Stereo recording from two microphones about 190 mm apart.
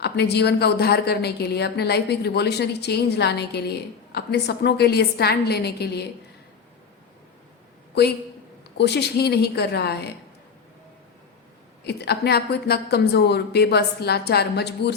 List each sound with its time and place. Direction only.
0.0 s a woman's voice: 60° left (ahead or behind)
8.8 s a woman's voice: 60° left (ahead or behind)
11.8 s a woman's voice: 60° left (ahead or behind)